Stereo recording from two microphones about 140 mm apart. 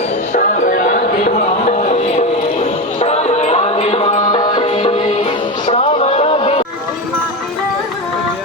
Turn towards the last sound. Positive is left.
turn(degrees=45)  # may be behind; listen again after turning